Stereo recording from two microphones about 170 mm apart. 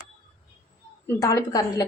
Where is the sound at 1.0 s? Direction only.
20° left (ahead or behind).